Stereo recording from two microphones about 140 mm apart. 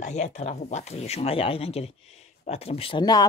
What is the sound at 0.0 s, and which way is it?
Speech, 55° left (ahead or behind).